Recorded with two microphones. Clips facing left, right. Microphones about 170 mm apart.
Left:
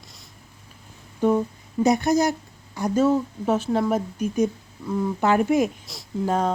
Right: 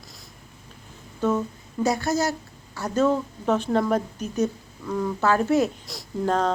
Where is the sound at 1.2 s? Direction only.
15° left (ahead or behind).